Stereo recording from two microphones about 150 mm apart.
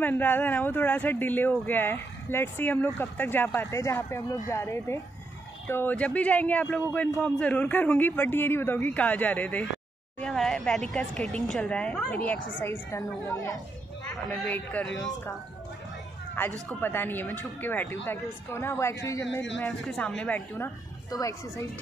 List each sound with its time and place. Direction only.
0.0 s a woman's voice: 15° left (ahead or behind)
14.3 s speech: 5° left (ahead or behind)
15.0 s a woman's voice: 25° left (ahead or behind)
16.6 s speech: 15° left (ahead or behind)
19.6 s speech: 5° left (ahead or behind)
21.1 s a woman's voice: 25° left (ahead or behind)